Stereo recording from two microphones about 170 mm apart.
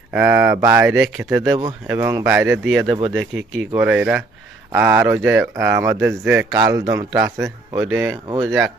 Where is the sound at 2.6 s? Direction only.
Centre (ahead or behind).